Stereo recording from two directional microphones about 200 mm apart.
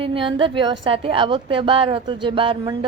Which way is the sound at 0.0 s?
25° right (ahead or behind).